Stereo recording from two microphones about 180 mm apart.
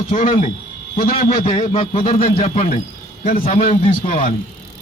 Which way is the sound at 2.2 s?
50° left (ahead or behind).